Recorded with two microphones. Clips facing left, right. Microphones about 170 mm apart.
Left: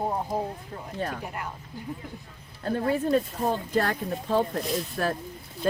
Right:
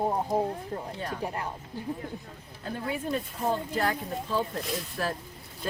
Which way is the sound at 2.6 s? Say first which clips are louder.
Left 7 dB; 60° left (ahead or behind).